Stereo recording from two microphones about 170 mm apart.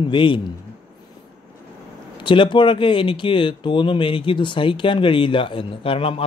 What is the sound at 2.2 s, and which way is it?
Speech, 30° left (ahead or behind).